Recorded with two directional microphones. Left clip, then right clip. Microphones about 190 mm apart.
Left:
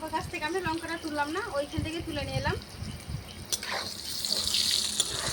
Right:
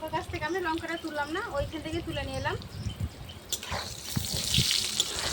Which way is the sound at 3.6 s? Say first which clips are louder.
Left 2 dB; 10° left (ahead or behind).